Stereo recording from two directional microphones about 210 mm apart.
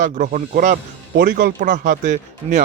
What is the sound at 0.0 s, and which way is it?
Speech, 35° right (ahead or behind).